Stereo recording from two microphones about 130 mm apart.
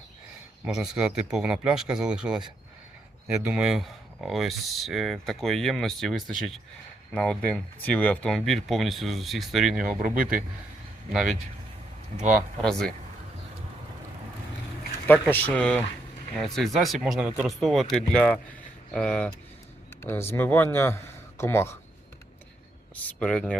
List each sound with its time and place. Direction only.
0.6 s speech: 5° right (ahead or behind)
12.6 s speech: 5° left (ahead or behind)
15.0 s speech: 15° left (ahead or behind)
20.0 s speech: 20° left (ahead or behind)
23.2 s speech: 5° left (ahead or behind)